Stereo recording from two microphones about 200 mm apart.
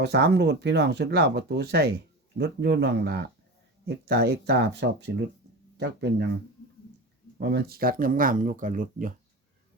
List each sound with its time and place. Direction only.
0.0 s speech: 55° right (ahead or behind)
7.3 s speech: 55° right (ahead or behind)